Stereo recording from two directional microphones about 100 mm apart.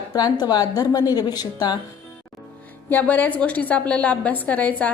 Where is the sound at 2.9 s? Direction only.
15° left (ahead or behind).